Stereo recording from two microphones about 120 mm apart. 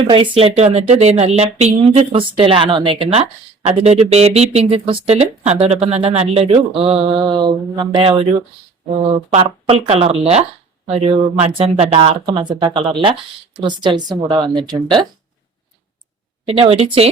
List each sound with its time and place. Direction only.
0.1 s speech: 50° right (ahead or behind)
3.7 s speech: 65° right (ahead or behind); by 8.2 s 40° right (ahead or behind)
9.3 s speech: 55° right (ahead or behind)
16.5 s speech: 55° right (ahead or behind)